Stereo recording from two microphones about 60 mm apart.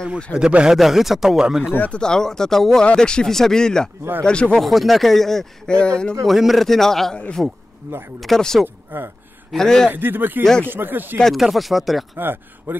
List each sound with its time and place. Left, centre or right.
0.3 s speech: left
0.7 s speech: centre
1.9 s speech: centre
4.6 s speech: centre
6.2 s speech: centre
7.4 s speech: centre
7.8 s speech: right
8.2 s speech: centre
8.6 s speech: right
9.5 s speech: centre
9.8 s speech: right
11.3 s speech: centre
12.2 s speech: right